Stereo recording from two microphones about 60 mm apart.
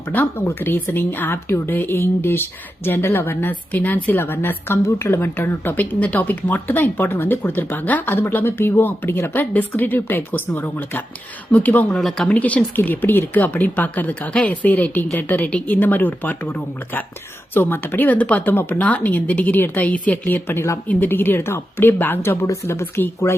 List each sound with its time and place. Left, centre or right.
0.1 s speech: left
11.9 s speech: centre
12.3 s speech: left